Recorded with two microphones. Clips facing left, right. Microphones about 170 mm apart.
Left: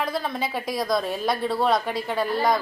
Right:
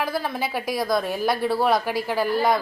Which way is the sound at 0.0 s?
5° right (ahead or behind).